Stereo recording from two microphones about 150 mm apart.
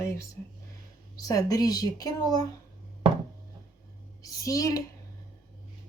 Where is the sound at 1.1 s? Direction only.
25° left (ahead or behind).